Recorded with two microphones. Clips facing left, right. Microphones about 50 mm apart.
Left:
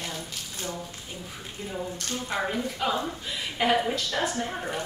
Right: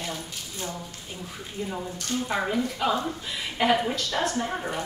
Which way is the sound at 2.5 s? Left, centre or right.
Centre.